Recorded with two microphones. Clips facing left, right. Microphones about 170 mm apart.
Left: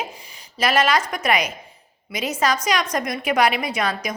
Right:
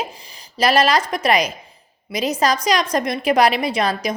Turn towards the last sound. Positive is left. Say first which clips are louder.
# right 4 dB
turn(degrees=-30)  # may be behind; listen again after turning